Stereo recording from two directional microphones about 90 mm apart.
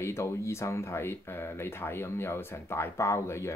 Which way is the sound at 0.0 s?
30° left (ahead or behind).